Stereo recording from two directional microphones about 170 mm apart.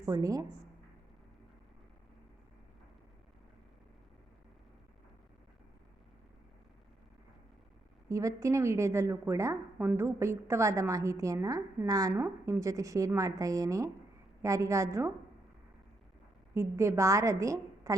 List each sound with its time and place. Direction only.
0.0 s a woman's voice: 20° right (ahead or behind)
8.1 s a woman's voice: 20° right (ahead or behind)
16.6 s a woman's voice: 15° right (ahead or behind)